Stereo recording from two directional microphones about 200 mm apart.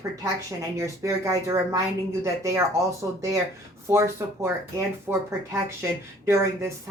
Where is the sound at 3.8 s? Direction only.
15° right (ahead or behind).